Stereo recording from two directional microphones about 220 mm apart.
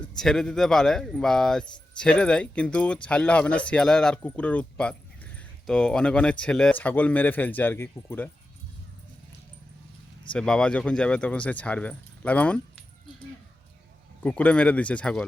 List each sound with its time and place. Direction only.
0.2 s speech: 5° left (ahead or behind)
10.3 s speech: 5° left (ahead or behind)
14.3 s speech: 5° left (ahead or behind)